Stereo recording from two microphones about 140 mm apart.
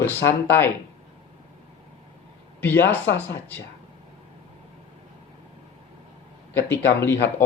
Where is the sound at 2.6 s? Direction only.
15° left (ahead or behind).